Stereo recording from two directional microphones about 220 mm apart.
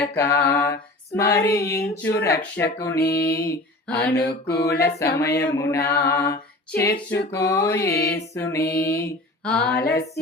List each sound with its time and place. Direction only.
0.1 s female singing: 10° left (ahead or behind)
3.0 s music: 45° left (ahead or behind)
3.4 s a sound: 10° left (ahead or behind)
4.0 s music: 45° left (ahead or behind)
4.9 s female singing: 10° left (ahead or behind)